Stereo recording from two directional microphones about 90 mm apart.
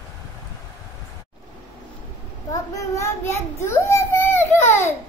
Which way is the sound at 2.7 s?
35° left (ahead or behind).